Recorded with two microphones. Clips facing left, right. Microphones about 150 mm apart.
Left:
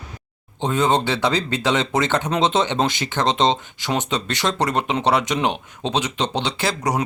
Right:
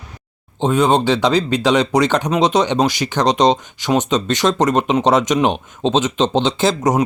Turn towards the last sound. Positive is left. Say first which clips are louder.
# right 7 dB
turn(degrees=-20)  # may be behind; listen again after turning